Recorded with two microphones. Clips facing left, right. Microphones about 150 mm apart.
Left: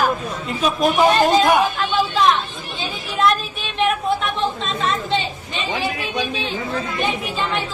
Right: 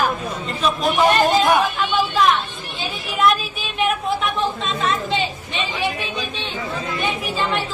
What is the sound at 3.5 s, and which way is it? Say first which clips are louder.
A woman's voice: left 1 dB; 5° right (ahead or behind).